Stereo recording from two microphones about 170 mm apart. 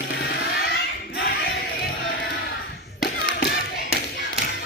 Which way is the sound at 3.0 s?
80° left.